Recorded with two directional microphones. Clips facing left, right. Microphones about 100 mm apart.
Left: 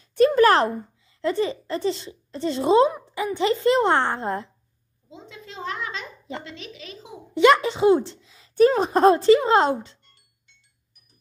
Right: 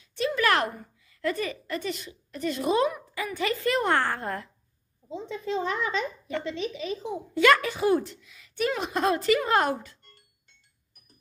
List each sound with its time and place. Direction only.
0.1 s a child's voice: 45° left (ahead or behind); by 4.5 s 25° left (ahead or behind)
6.3 s speech: 25° left (ahead or behind)
10.0 s music: 45° right (ahead or behind)